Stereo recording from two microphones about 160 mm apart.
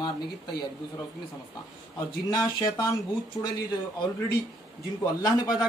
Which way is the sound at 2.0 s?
25° left (ahead or behind).